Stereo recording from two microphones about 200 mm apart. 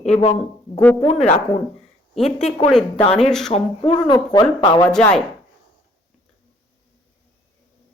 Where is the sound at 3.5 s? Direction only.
25° left (ahead or behind).